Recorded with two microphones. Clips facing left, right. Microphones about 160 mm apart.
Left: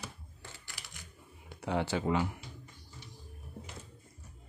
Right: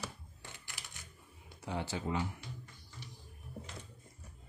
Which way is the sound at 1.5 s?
70° left (ahead or behind).